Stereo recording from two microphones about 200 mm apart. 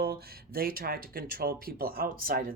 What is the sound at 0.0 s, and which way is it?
Speech, 50° right (ahead or behind).